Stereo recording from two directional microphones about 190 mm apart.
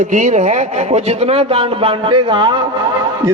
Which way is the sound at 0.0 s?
40° right (ahead or behind).